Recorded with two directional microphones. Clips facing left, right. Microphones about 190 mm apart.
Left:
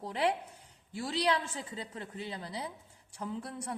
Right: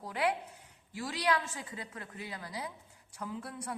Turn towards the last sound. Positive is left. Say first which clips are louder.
# left 2 dB
turn(degrees=30)  # may be behind; listen again after turning